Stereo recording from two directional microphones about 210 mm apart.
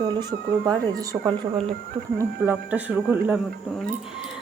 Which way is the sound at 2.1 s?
10° right (ahead or behind).